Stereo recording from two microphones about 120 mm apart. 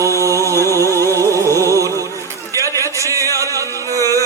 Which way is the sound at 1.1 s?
25° right (ahead or behind).